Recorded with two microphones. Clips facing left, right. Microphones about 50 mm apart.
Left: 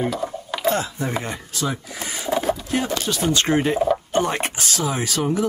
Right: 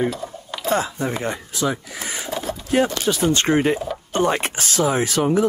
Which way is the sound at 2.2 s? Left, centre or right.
Centre.